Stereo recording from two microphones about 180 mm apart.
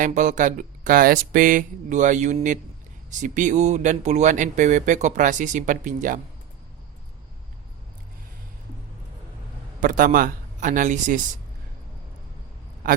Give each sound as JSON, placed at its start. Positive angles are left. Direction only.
{"t": 0.0, "sound": "speech", "side_deg": -45}
{"t": 9.8, "sound": "speech", "side_deg": -50}